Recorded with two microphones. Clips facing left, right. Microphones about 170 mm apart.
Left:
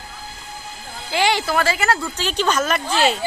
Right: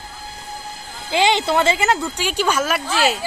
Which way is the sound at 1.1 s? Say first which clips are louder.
Right 2 dB; 20° right (ahead or behind).